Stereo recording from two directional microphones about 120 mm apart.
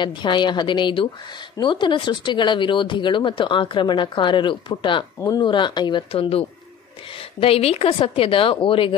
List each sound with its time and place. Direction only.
0.0 s a woman's voice: 40° left (ahead or behind)